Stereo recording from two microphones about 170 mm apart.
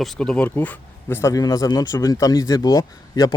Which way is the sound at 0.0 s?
Centre (ahead or behind).